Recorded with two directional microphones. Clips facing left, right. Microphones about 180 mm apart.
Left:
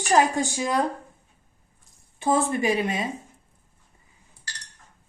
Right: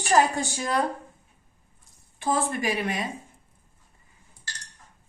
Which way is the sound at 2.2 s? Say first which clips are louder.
Left 4 dB; 25° left (ahead or behind).